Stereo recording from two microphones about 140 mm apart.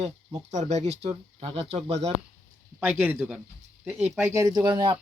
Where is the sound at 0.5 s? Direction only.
50° right (ahead or behind).